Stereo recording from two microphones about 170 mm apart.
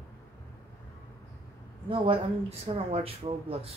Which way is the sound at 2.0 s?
35° right (ahead or behind).